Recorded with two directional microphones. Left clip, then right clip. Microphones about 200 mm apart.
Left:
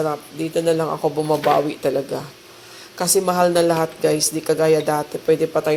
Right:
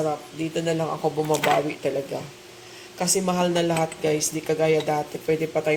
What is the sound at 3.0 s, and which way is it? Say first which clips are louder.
Speech: left 6 dB; 20° left (ahead or behind).